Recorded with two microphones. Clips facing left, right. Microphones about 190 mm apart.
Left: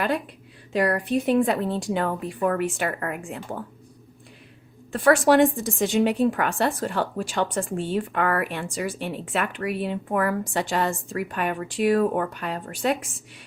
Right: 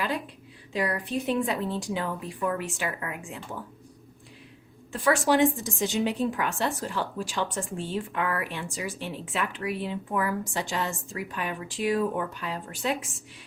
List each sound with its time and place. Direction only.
0.7 s speech: 55° left (ahead or behind)
4.9 s speech: 50° left (ahead or behind)